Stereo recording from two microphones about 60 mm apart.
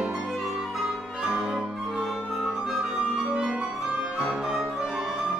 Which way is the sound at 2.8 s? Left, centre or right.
Centre.